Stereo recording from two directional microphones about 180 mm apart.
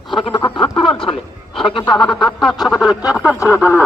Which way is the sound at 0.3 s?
25° left (ahead or behind).